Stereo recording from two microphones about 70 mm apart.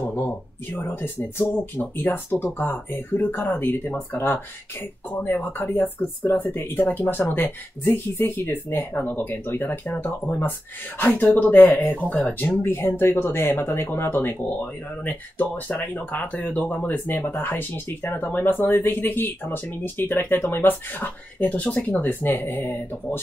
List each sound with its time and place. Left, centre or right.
0.1 s speech: left
5.1 s speech: left
15.0 s speech: left